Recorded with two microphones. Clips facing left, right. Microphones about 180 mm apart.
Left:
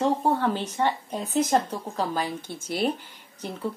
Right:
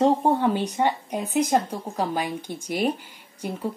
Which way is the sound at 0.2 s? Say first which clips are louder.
Right 3 dB; 15° right (ahead or behind).